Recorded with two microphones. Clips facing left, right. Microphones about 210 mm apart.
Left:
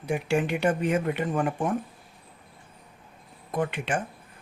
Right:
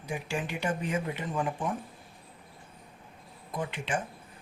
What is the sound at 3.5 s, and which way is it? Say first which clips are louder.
Speech: left 5 dB; 60° left (ahead or behind).